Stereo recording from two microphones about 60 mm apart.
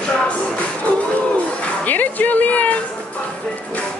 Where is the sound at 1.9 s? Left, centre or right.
Left.